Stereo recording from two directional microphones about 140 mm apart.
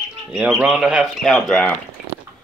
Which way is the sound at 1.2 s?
5° left (ahead or behind).